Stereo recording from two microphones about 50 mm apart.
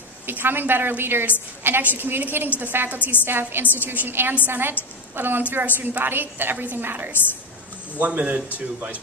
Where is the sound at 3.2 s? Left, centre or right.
Right.